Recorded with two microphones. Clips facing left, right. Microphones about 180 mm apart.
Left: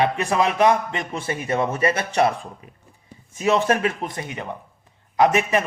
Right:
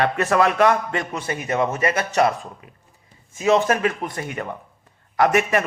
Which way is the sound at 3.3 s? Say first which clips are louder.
Right 2 dB; 30° right (ahead or behind).